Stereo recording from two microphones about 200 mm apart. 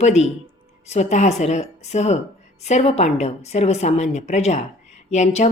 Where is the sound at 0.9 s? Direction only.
35° left (ahead or behind).